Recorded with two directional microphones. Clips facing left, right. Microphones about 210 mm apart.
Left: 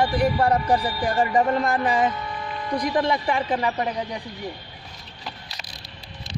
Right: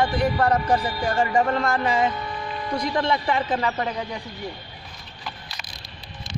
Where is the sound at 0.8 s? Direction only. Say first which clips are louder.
Left 1 dB; 30° left (ahead or behind).